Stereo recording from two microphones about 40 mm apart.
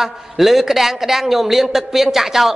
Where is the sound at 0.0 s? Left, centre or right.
Centre.